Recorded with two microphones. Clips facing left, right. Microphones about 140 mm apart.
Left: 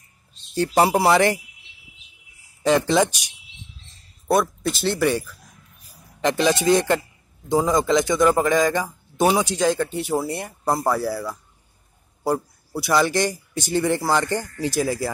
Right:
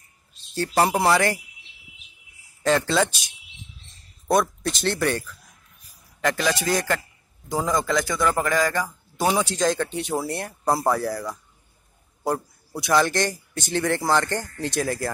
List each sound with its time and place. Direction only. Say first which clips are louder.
0.6 s a man's voice: left 3 dB; 15° left (ahead or behind)
2.6 s a man's voice: left 3 dB; 15° left (ahead or behind)
4.3 s a man's voice: left 1 dB; 5° left (ahead or behind)